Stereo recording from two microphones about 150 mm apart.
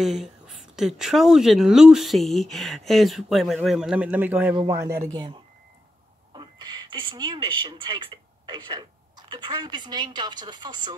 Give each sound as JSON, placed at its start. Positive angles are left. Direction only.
{"t": 0.0, "sound": "a woman's voice", "side_deg": 0}
{"t": 4.8, "sound": "speech", "side_deg": -30}